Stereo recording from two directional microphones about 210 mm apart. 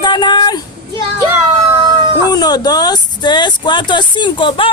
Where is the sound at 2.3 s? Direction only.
20° left (ahead or behind).